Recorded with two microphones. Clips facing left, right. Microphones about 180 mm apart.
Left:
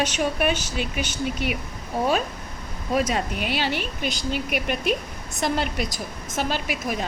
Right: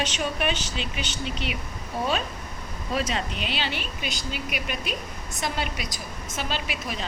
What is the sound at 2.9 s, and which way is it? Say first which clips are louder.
A woman's voice: left 5 dB; 45° left (ahead or behind).